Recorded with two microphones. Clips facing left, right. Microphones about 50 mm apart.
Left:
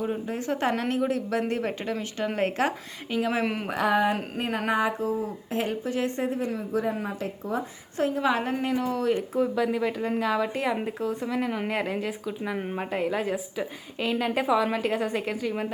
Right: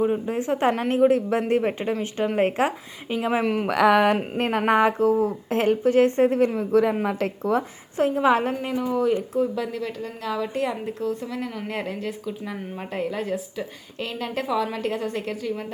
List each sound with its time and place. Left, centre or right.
0.0 s a woman's voice: right
1.8 s speech: centre
3.4 s speech: centre
3.7 s a woman's voice: right
4.4 s speech: right
6.6 s a woman's voice: right
7.0 s a woman's voice: right
7.9 s a woman's voice: right
8.8 s speech: centre
9.0 s speech: centre
9.7 s a woman's voice: centre